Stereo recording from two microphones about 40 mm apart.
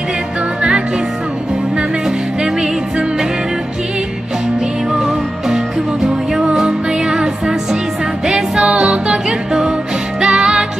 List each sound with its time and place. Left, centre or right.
0.6 s music: right
4.9 s music: centre
8.6 s music: right